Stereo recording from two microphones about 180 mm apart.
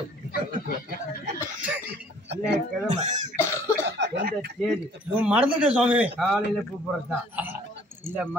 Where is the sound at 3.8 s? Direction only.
70° right (ahead or behind).